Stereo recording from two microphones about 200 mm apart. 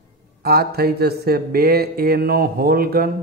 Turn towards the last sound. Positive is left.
turn(degrees=-50)  # may be behind; listen again after turning